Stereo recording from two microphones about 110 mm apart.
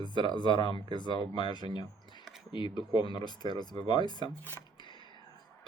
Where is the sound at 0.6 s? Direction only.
50° right (ahead or behind).